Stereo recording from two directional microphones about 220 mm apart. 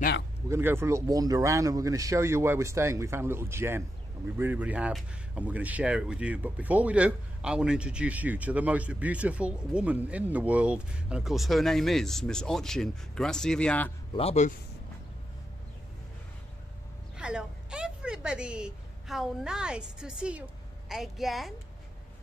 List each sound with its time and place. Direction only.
0.5 s speech: 10° right (ahead or behind); by 13.9 s 5° left (ahead or behind)
14.1 s speech: 30° left (ahead or behind)
17.2 s a woman's voice: 5° right (ahead or behind)